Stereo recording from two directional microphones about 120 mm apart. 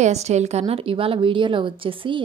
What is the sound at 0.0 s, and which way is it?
A woman's voice, 70° right (ahead or behind).